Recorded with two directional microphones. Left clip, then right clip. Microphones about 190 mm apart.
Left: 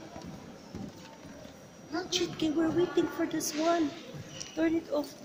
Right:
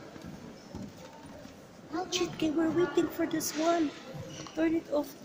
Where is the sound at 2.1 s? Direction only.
Centre (ahead or behind).